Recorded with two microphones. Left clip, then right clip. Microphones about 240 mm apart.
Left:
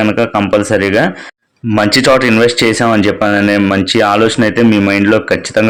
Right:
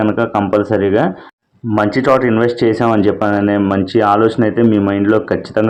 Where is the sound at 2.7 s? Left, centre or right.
Left.